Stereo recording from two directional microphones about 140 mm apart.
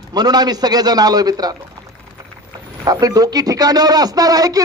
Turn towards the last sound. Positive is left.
turn(degrees=-25)  # may be behind; listen again after turning